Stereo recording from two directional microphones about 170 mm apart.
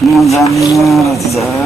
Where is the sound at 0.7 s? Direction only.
Centre (ahead or behind).